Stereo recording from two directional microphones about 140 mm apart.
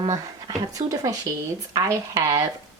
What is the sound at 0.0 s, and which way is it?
A woman's voice, 30° right (ahead or behind).